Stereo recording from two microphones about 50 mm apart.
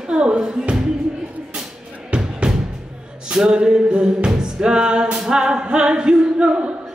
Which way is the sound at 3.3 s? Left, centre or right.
Centre.